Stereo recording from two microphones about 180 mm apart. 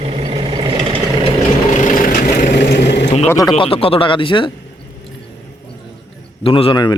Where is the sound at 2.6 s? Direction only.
75° left (ahead or behind).